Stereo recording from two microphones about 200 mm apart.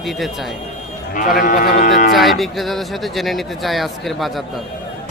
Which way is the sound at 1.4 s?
45° left (ahead or behind).